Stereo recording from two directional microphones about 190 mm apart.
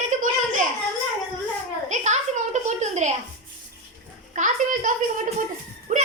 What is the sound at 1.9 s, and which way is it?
A woman's voice, 40° right (ahead or behind).